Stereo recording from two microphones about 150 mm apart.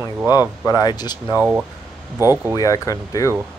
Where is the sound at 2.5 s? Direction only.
20° left (ahead or behind).